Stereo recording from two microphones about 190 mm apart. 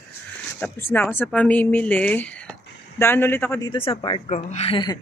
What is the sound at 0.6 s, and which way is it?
Speech, 10° left (ahead or behind).